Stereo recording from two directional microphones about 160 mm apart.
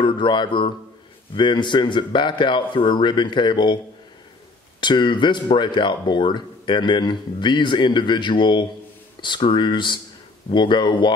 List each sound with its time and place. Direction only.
0.0 s a man's voice: 30° left (ahead or behind)